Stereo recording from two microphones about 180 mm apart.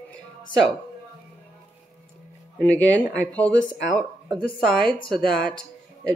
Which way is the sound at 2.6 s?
10° left (ahead or behind).